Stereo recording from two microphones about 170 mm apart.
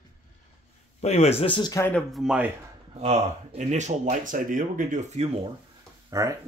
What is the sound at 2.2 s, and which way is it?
Speech, 10° right (ahead or behind).